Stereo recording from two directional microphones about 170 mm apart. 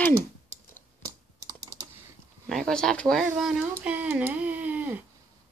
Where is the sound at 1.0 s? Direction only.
20° right (ahead or behind).